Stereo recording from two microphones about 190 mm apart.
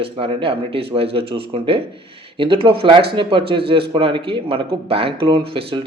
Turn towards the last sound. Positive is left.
turn(degrees=-25)  # may be behind; listen again after turning